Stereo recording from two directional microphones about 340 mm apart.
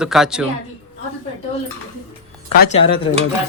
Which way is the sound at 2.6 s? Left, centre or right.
Centre.